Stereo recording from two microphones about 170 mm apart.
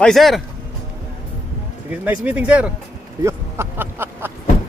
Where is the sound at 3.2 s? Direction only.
15° right (ahead or behind).